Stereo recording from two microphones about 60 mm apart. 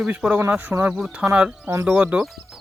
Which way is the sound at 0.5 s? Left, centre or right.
Right.